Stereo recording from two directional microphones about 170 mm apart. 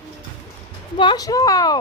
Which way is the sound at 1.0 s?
25° left (ahead or behind).